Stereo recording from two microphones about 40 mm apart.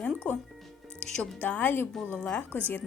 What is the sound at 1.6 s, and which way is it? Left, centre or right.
A woman's voice, left.